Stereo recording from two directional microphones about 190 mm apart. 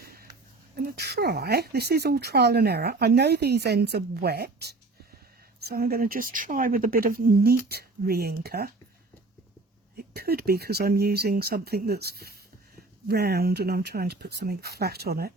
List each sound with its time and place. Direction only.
0.0 s a sound: 50° right (ahead or behind)
0.8 s a woman's voice: 60° right (ahead or behind)
10.0 s speech: 55° right (ahead or behind)